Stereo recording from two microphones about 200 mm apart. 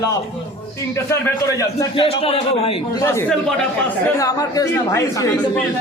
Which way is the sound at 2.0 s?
30° left (ahead or behind).